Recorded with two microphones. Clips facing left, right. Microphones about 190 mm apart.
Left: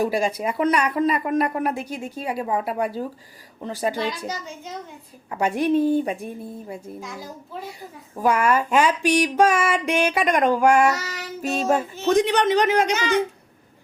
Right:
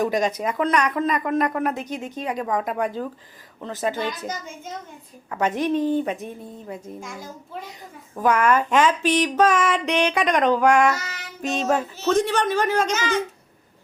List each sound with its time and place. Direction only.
0.0 s speech: 10° left (ahead or behind)
5.4 s speech: 10° left (ahead or behind)
13.0 s a child's voice: 60° left (ahead or behind)